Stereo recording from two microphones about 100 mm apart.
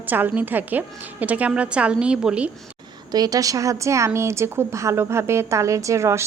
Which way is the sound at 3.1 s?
40° right (ahead or behind).